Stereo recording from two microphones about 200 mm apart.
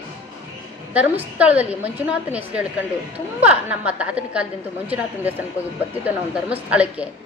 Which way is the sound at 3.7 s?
5° right (ahead or behind).